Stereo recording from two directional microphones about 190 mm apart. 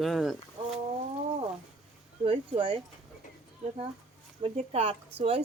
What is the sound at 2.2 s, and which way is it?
Speech, 30° right (ahead or behind).